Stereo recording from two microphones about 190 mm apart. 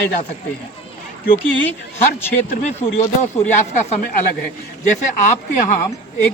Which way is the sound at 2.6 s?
35° left (ahead or behind).